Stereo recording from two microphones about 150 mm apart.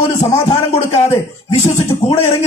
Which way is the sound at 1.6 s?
50° left (ahead or behind).